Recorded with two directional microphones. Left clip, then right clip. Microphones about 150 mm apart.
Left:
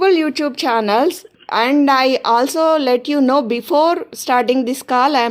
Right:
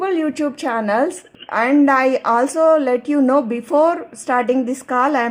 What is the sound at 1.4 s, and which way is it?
Speech, 55° left (ahead or behind).